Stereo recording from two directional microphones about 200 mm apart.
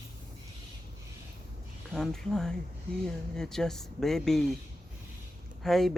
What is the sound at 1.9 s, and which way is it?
Speech, centre (ahead or behind).